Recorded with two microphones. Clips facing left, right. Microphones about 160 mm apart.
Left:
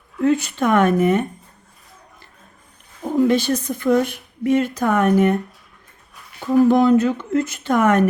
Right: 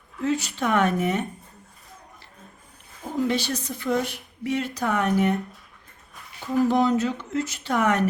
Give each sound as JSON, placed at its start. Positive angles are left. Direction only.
{"t": 0.2, "sound": "speech", "side_deg": 55}
{"t": 3.0, "sound": "speech", "side_deg": 50}
{"t": 6.4, "sound": "speech", "side_deg": 55}